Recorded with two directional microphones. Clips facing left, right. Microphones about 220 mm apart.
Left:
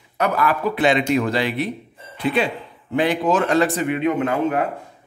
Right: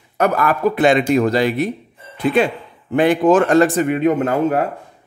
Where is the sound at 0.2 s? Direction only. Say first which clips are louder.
Right 4 dB; 45° right (ahead or behind).